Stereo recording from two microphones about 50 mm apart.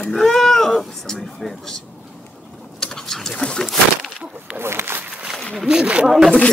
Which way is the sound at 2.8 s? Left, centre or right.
Centre.